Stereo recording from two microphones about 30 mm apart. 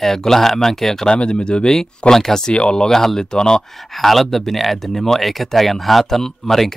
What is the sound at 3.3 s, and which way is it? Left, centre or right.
Speech, left.